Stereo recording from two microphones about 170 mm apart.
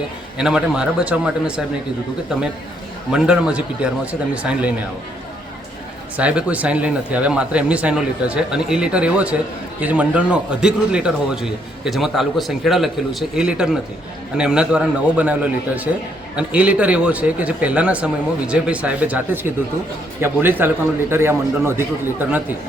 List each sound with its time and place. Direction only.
0.3 s a man's voice: 5° right (ahead or behind)
3.1 s a man's voice: 5° right (ahead or behind)
6.1 s a man's voice: 10° right (ahead or behind)